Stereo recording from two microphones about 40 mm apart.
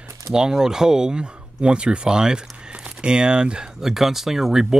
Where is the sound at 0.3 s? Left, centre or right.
Centre.